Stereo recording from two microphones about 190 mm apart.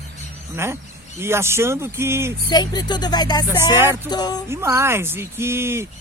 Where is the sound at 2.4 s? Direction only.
20° left (ahead or behind).